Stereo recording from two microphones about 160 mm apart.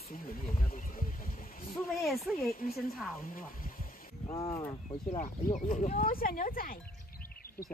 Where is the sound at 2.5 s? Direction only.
60° left (ahead or behind).